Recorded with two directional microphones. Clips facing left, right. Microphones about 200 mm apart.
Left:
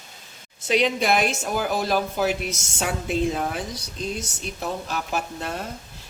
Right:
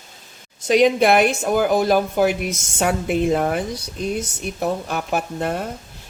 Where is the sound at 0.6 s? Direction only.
45° right (ahead or behind).